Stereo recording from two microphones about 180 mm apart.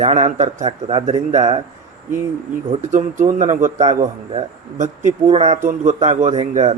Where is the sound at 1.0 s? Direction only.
45° right (ahead or behind).